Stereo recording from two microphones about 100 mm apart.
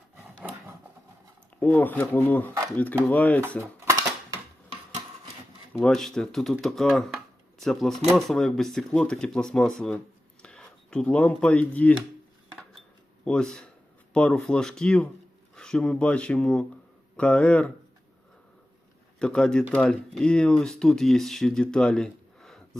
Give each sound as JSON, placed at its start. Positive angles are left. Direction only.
{"t": 1.5, "sound": "speech", "side_deg": 15}
{"t": 5.8, "sound": "speech", "side_deg": 5}
{"t": 13.2, "sound": "speech", "side_deg": 10}
{"t": 19.2, "sound": "speech", "side_deg": 10}